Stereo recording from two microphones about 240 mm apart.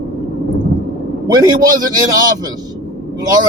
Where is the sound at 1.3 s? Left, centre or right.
Centre.